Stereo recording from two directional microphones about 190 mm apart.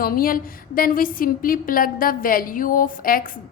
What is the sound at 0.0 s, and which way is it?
A woman's voice, 50° left (ahead or behind).